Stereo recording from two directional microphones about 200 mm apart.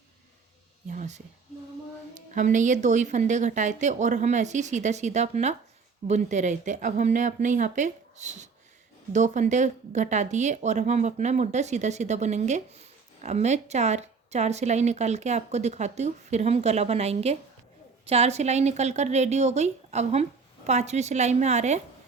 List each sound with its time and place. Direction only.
0.9 s speech: 35° right (ahead or behind)
2.3 s speech: 40° right (ahead or behind)